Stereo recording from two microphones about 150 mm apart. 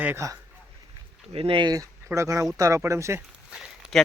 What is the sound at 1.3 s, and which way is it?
Speech, 40° right (ahead or behind).